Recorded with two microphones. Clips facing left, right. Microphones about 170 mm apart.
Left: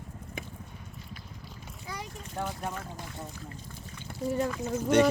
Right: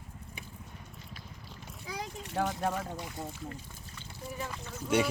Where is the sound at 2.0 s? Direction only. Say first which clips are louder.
Right 5 dB; 85° right.